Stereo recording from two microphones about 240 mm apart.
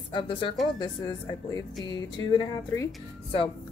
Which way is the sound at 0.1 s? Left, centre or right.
Centre.